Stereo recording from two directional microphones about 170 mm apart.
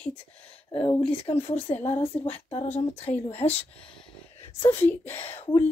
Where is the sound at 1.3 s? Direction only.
25° left (ahead or behind).